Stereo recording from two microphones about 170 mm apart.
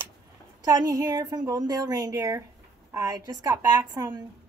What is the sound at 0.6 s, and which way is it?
Speech, 20° right (ahead or behind).